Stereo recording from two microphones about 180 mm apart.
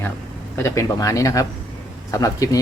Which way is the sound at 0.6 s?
15° left (ahead or behind).